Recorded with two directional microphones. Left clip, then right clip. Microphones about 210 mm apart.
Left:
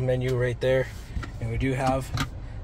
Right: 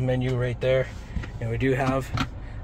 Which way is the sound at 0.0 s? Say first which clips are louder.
Left 1 dB; centre (ahead or behind).